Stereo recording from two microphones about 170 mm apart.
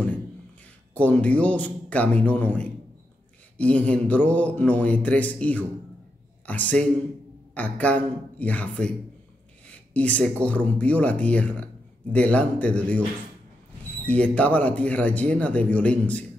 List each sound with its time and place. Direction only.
0.9 s a man's voice: 10° left (ahead or behind)
14.0 s speech: 10° left (ahead or behind)